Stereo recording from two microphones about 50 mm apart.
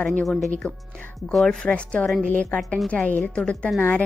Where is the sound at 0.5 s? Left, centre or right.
Centre.